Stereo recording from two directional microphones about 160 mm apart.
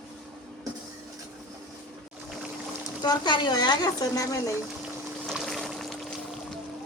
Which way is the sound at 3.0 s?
25° left (ahead or behind).